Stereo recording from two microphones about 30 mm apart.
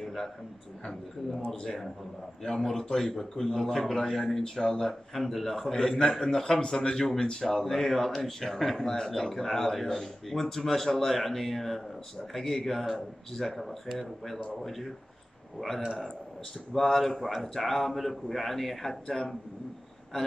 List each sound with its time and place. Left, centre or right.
0.0 s a sound: centre
1.5 s speech: centre
6.0 s a man's voice: centre
7.4 s speech: centre
16.7 s speech: centre